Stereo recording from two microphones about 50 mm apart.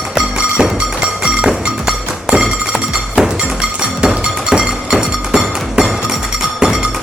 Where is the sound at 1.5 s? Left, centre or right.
Centre.